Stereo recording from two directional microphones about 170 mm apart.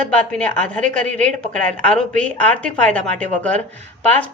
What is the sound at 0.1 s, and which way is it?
A woman's voice, 5° left (ahead or behind).